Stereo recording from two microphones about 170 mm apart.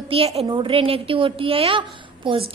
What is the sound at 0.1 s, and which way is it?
A woman's voice, 35° right (ahead or behind).